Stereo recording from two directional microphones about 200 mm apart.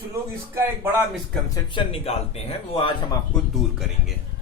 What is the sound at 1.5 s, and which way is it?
Speech, 25° left (ahead or behind).